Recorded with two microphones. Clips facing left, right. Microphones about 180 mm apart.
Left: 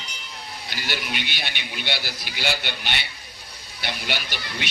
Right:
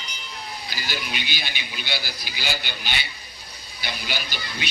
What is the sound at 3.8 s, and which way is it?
Speech, 65° left (ahead or behind).